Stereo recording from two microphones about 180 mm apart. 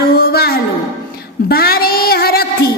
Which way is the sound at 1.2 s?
60° left (ahead or behind).